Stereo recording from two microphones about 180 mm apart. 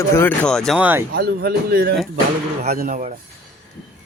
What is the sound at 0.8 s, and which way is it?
Speech, 10° right (ahead or behind).